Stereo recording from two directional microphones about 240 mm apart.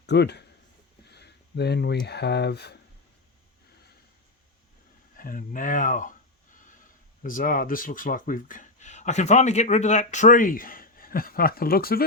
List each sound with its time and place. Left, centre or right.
0.0 s speech: left
1.1 s a sound: left
2.0 s speech: left
5.1 s speech: left
7.2 s speech: left